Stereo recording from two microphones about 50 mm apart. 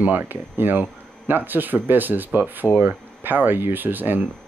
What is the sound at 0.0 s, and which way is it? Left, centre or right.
Speech, right.